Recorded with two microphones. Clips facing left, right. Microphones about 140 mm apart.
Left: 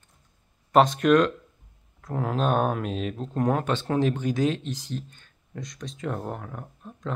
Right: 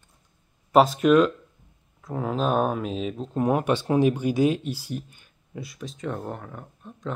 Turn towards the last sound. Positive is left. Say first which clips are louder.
# left 1 dB
turn(degrees=0)  # may be behind; listen again after turning